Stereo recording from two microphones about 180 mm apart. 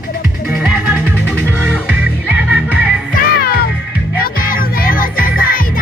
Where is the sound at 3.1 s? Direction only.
55° left (ahead or behind).